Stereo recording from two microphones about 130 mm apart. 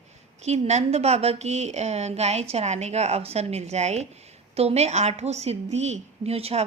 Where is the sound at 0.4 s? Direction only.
55° right (ahead or behind).